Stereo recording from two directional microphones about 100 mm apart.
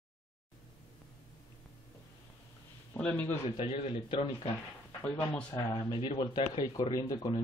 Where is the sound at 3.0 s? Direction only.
15° left (ahead or behind).